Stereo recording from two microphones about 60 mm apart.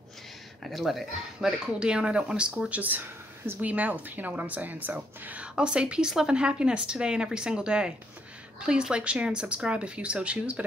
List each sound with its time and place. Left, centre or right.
0.7 s speech: centre
1.8 s speech: centre
2.7 s speech: right